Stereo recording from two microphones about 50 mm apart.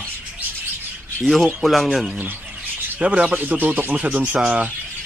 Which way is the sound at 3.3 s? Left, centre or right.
Right.